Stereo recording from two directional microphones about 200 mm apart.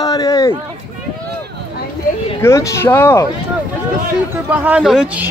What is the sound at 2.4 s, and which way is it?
Speech, 15° left (ahead or behind).